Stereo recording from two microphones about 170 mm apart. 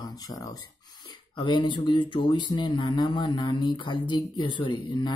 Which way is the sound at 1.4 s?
25° left (ahead or behind).